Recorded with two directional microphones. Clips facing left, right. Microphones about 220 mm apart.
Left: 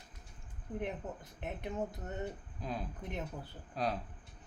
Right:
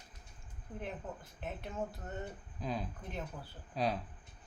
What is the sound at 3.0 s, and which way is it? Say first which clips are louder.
Speech: left 2 dB; 20° left (ahead or behind).